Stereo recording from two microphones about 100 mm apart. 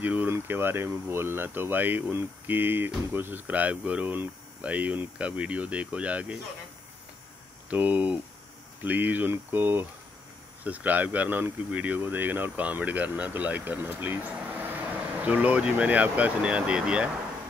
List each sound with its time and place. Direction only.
0.0 s speech: 15° right (ahead or behind)
7.7 s speech: 15° right (ahead or behind)